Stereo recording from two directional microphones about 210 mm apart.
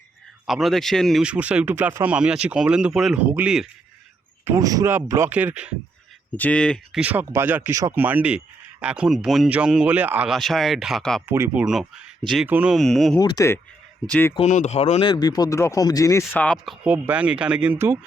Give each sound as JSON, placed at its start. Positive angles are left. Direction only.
{"t": 0.4, "sound": "speech", "side_deg": 0}
{"t": 4.4, "sound": "speech", "side_deg": -15}
{"t": 6.3, "sound": "speech", "side_deg": 5}
{"t": 7.0, "sound": "speech", "side_deg": -10}
{"t": 11.3, "sound": "speech", "side_deg": -10}
{"t": 13.1, "sound": "speech", "side_deg": 20}
{"t": 14.3, "sound": "speech", "side_deg": 35}
{"t": 15.1, "sound": "speech", "side_deg": 20}
{"t": 16.8, "sound": "speech", "side_deg": -5}